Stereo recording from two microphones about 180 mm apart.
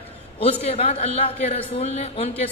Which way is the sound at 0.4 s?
35° left (ahead or behind).